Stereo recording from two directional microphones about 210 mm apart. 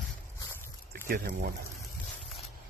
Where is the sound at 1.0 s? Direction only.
45° right (ahead or behind).